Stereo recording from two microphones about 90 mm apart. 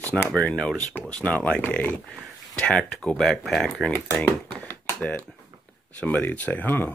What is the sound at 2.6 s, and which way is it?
Speech, 10° left (ahead or behind).